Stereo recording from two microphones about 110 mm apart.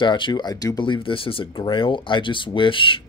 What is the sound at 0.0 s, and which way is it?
Speech, 45° left (ahead or behind).